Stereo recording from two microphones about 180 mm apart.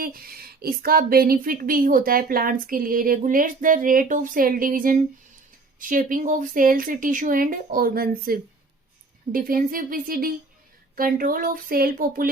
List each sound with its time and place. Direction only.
0.0 s speech: 55° right (ahead or behind)